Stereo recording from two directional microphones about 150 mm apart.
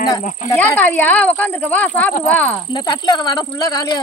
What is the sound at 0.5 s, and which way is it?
Speech, 15° left (ahead or behind).